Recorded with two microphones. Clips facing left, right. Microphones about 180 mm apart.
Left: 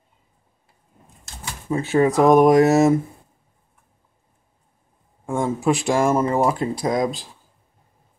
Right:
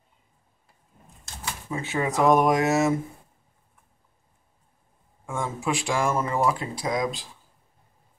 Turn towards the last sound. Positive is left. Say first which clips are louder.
# left 6 dB
turn(degrees=40)  # may be behind; listen again after turning